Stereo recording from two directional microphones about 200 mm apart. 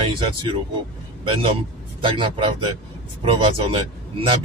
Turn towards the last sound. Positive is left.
turn(degrees=-25)  # may be behind; listen again after turning